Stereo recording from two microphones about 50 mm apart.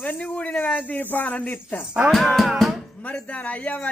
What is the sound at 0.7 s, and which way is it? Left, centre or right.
Speech, left.